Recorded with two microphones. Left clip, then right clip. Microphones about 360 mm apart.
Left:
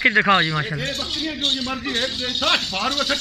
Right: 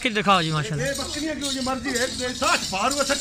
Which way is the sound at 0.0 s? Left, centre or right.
Centre.